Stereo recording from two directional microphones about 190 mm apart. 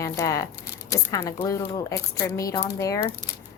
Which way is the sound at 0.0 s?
15° left (ahead or behind).